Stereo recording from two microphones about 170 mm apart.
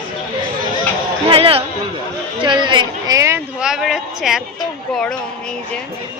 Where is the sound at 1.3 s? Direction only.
35° right (ahead or behind).